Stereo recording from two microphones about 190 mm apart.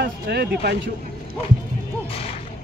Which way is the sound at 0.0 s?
55° right (ahead or behind).